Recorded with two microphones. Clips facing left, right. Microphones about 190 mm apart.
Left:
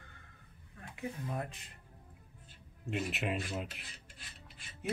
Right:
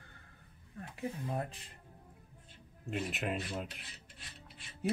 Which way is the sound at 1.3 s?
35° right (ahead or behind).